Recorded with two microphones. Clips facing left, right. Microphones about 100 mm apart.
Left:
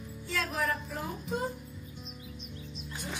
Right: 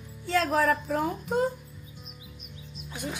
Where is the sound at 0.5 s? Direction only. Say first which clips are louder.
Right 8 dB; 90° right.